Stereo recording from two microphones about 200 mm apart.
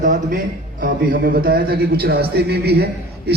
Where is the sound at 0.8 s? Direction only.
50° right (ahead or behind).